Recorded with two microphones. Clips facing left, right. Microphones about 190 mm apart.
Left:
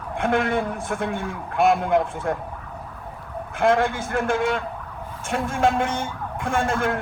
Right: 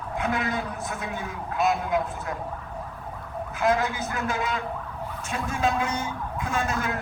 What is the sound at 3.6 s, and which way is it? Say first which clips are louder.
A man's voice: left 5 dB; 50° left (ahead or behind).